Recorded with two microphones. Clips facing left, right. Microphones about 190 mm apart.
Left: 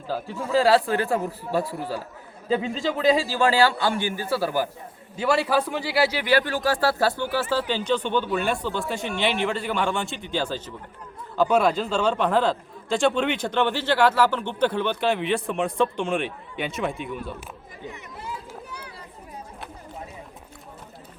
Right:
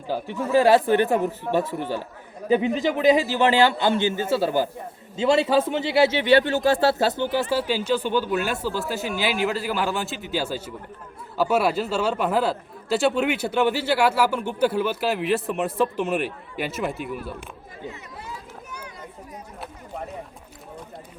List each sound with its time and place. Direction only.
0.1 s a man's voice: 20° right (ahead or behind)
7.5 s a man's voice: 10° right (ahead or behind)